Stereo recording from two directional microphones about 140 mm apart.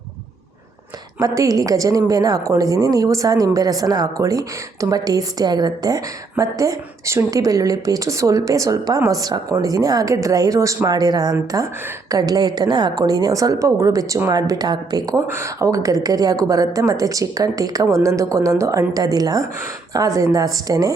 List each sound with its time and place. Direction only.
1.2 s a woman's voice: 25° right (ahead or behind)